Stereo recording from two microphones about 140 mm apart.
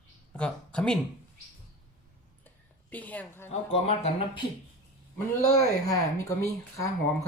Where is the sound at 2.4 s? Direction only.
10° left (ahead or behind).